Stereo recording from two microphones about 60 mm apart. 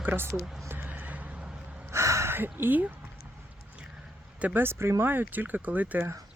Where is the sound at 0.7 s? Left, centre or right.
Right.